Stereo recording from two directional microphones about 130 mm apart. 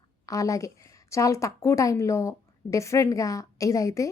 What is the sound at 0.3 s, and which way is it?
Speech, 25° left (ahead or behind).